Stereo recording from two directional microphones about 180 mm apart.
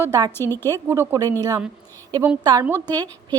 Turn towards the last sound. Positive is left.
turn(degrees=-20)  # may be behind; listen again after turning